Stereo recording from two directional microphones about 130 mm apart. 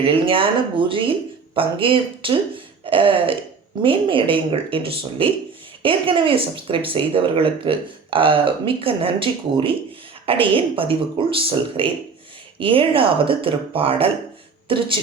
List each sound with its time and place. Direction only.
0.0 s a woman's voice: 45° right (ahead or behind)